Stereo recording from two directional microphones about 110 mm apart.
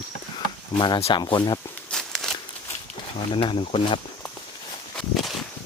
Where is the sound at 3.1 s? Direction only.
50° left (ahead or behind).